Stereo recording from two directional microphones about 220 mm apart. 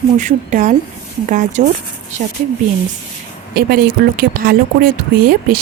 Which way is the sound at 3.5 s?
45° right (ahead or behind).